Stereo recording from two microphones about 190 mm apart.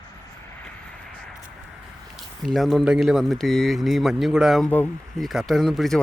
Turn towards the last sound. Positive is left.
turn(degrees=0)  # may be behind; listen again after turning